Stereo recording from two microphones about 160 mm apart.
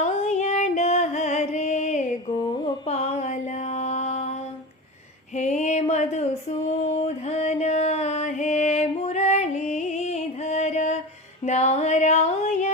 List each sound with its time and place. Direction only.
0.0 s music: 45° left (ahead or behind)
2.8 s mantra: 40° left (ahead or behind)
5.4 s a sound: 45° left (ahead or behind)
11.4 s music: 45° left (ahead or behind)